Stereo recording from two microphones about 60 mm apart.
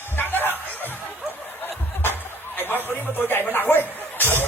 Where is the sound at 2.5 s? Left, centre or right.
Left.